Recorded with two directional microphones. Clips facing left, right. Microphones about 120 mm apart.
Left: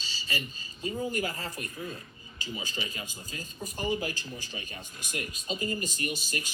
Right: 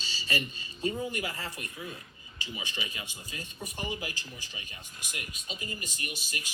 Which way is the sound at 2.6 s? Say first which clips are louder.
Left 2 dB; 35° left (ahead or behind).